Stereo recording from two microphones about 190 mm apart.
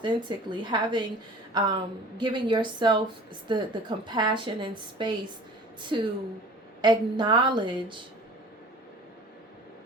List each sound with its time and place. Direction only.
0.0 s a woman's voice: 25° right (ahead or behind)